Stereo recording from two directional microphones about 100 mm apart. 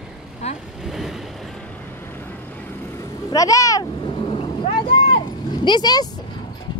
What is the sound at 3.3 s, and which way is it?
Speech, 35° left (ahead or behind).